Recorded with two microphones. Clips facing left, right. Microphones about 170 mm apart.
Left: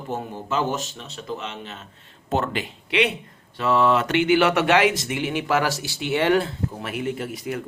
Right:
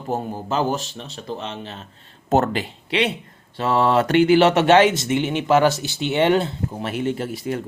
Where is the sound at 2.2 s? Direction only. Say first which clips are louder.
Right 5 dB; 45° right (ahead or behind).